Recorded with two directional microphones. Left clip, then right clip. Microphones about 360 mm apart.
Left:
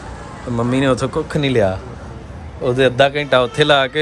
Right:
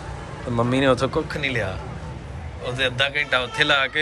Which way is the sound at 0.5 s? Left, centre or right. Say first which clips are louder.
Left 2 dB; centre.